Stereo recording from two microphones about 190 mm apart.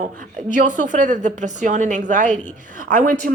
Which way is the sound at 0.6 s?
40° right (ahead or behind).